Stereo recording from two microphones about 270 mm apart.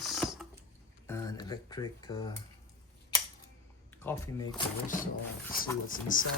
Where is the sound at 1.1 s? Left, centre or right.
Centre.